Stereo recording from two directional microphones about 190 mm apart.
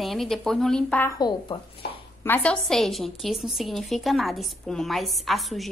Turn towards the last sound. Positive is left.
turn(degrees=0)  # may be behind; listen again after turning